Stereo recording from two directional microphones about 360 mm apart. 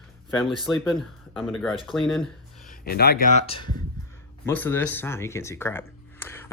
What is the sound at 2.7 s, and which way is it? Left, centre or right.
Speech, left.